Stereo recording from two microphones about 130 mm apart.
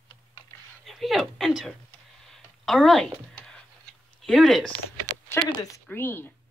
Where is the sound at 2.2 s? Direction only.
Centre (ahead or behind).